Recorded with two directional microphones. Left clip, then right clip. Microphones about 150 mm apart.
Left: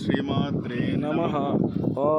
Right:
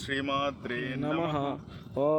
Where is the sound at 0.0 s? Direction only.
60° right (ahead or behind).